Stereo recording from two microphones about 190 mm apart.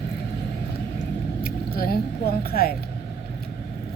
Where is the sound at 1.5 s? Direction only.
50° left (ahead or behind).